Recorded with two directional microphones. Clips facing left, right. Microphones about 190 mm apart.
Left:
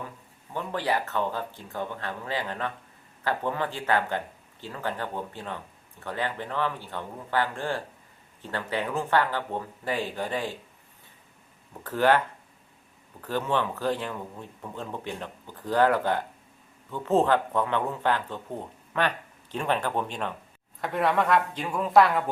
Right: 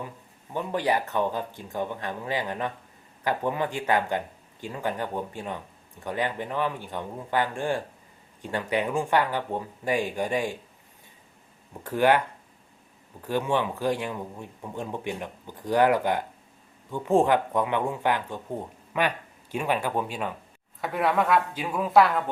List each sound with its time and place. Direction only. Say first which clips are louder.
0.5 s speech: right 2 dB; 15° right (ahead or behind)
11.7 s speech: right 1 dB; 15° right (ahead or behind)
13.2 s a woman's voice: right 2 dB; 15° right (ahead or behind)